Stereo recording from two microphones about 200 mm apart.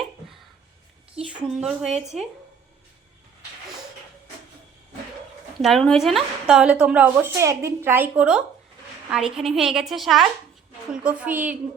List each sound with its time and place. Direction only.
1.5 s a woman's voice: centre (ahead or behind)
1.9 s speech: 35° right (ahead or behind)
5.5 s a woman's voice: centre (ahead or behind)